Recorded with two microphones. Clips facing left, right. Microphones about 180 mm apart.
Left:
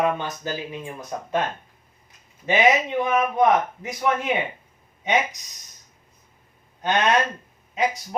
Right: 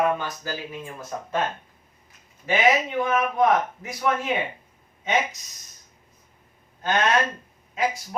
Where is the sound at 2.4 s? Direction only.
20° left (ahead or behind).